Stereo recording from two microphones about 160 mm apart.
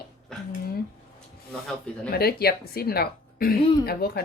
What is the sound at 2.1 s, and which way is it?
A child's voice, 75° left (ahead or behind).